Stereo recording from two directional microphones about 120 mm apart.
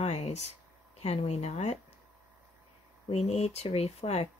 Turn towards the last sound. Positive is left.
turn(degrees=60)  # may be behind; listen again after turning